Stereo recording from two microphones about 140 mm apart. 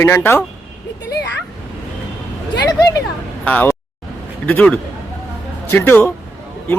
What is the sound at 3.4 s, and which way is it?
Speech, 10° left (ahead or behind).